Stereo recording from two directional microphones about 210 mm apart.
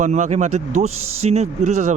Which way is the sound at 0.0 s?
35° right (ahead or behind).